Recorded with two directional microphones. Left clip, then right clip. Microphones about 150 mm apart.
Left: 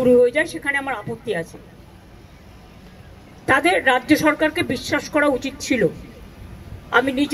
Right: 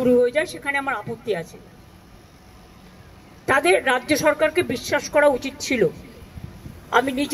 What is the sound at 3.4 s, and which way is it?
A woman's voice, 30° right (ahead or behind).